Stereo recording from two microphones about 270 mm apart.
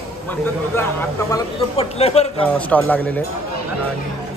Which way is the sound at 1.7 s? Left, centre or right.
Left.